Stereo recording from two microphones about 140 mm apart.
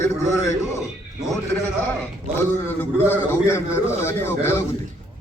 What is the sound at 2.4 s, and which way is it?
A man's voice, 15° left (ahead or behind).